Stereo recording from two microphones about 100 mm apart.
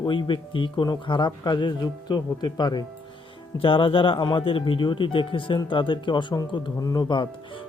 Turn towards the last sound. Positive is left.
turn(degrees=55)  # may be behind; listen again after turning